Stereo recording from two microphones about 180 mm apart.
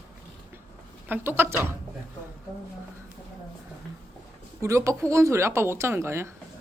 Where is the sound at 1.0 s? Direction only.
10° right (ahead or behind).